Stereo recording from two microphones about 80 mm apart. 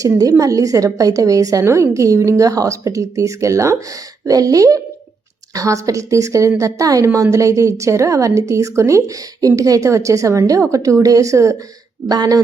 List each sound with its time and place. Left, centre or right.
0.2 s a woman's voice: right
12.0 s speech: right